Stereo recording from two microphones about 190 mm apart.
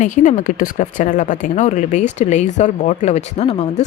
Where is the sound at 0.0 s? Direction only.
40° left (ahead or behind).